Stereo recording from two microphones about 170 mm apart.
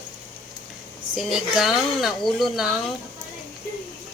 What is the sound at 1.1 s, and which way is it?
Speech, centre (ahead or behind).